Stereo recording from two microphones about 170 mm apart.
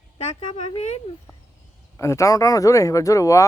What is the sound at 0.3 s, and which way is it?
Speech, 40° left (ahead or behind).